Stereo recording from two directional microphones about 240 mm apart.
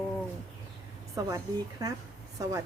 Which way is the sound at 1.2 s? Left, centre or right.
Centre.